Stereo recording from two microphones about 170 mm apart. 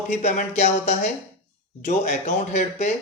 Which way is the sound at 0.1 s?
45° left (ahead or behind).